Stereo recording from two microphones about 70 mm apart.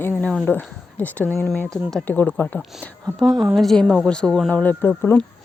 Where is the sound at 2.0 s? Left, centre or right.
Left.